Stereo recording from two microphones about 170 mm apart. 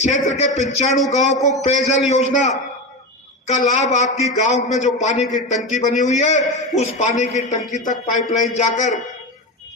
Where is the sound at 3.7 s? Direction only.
45° left (ahead or behind).